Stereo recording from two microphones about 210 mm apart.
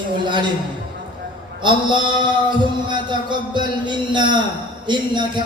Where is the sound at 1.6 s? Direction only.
20° right (ahead or behind).